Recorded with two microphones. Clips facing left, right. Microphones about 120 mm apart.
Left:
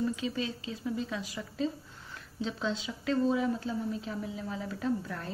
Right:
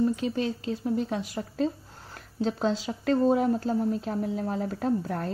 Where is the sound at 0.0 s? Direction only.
45° right (ahead or behind).